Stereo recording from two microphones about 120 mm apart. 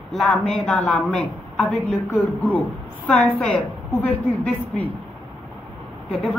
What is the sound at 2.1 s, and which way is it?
Speech, 15° left (ahead or behind).